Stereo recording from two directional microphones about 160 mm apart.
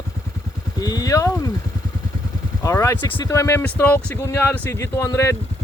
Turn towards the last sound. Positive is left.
turn(degrees=20)  # may be behind; listen again after turning